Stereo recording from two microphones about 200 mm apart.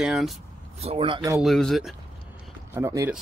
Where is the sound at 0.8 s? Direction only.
25° right (ahead or behind).